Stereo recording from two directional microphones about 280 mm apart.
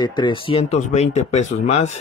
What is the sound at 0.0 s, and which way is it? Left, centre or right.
Speech, centre.